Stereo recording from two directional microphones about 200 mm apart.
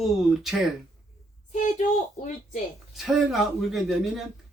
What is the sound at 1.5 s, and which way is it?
Speech, 40° left (ahead or behind).